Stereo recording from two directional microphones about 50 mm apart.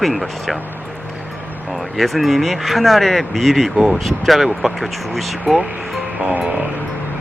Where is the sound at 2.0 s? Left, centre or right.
Centre.